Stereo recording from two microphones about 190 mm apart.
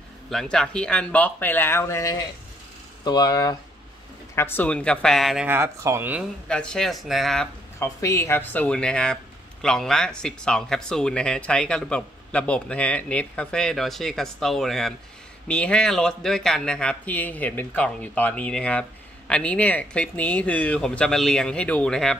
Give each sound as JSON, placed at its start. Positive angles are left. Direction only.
{"t": 0.3, "sound": "speech", "side_deg": 0}
{"t": 4.4, "sound": "speech", "side_deg": 10}
{"t": 6.5, "sound": "speech", "side_deg": 5}
{"t": 7.8, "sound": "speech", "side_deg": 15}